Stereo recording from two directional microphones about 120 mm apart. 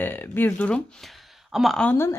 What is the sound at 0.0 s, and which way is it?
Speech, 15° left (ahead or behind).